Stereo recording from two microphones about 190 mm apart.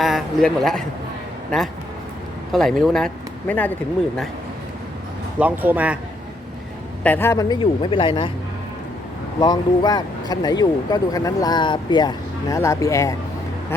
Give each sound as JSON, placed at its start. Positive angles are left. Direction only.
{"t": 0.0, "sound": "a man's voice", "side_deg": 0}
{"t": 5.4, "sound": "speech", "side_deg": -10}
{"t": 7.0, "sound": "speech", "side_deg": 10}
{"t": 9.4, "sound": "speech", "side_deg": 20}